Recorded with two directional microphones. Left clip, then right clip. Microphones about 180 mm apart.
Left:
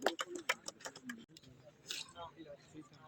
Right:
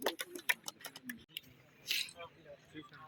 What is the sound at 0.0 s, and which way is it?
Tick-tock, 25° right (ahead or behind).